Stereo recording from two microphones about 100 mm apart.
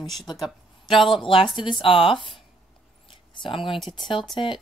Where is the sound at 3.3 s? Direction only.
55° left (ahead or behind).